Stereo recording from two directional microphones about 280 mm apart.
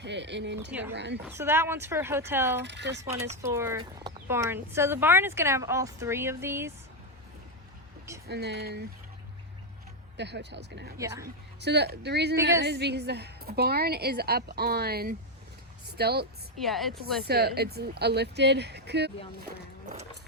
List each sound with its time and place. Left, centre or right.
0.0 s a woman's voice: right
0.7 s speech: centre
0.9 s a woman's voice: right
1.3 s speech: centre
2.6 s a woman's voice: right
3.4 s speech: centre
8.3 s a woman's voice: right
10.2 s a woman's voice: right
10.9 s speech: centre
11.6 s a woman's voice: right
16.6 s speech: centre
17.2 s a woman's voice: right